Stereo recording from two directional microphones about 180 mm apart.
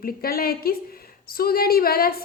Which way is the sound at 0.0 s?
55° left (ahead or behind).